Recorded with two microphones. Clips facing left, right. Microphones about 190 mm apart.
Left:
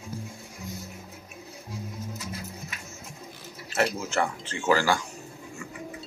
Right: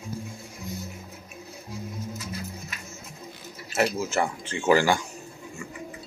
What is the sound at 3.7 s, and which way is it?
Speech, 10° right (ahead or behind).